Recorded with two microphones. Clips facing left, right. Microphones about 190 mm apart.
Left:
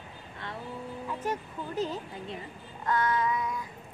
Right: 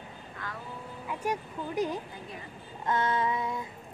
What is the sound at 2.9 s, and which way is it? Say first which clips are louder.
Child singing: even; 25° right (ahead or behind).